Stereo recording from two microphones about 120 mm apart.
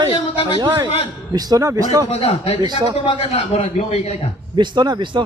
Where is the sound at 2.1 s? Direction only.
55° left (ahead or behind).